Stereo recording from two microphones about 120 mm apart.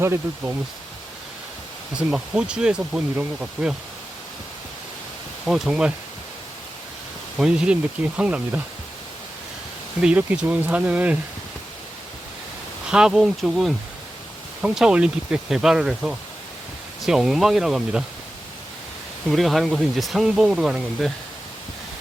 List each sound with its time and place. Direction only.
0.0 s speech: 20° right (ahead or behind)
2.0 s speech: 5° right (ahead or behind)
5.5 s speech: 5° right (ahead or behind)
7.3 s speech: 5° right (ahead or behind)
10.0 s speech: 10° right (ahead or behind)
12.9 s speech: 5° right (ahead or behind)
19.3 s speech: centre (ahead or behind)